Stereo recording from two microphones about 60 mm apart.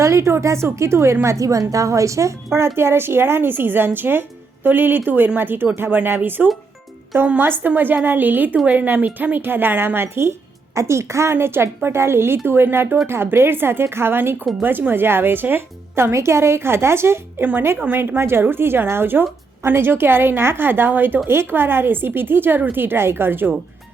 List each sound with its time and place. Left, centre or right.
0.0 s a woman's voice: right
2.7 s a woman's voice: right
16.1 s a woman's voice: right